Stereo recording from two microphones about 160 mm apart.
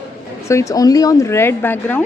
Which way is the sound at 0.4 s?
20° left (ahead or behind).